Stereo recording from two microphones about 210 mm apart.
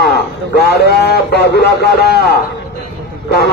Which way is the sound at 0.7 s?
50° left (ahead or behind).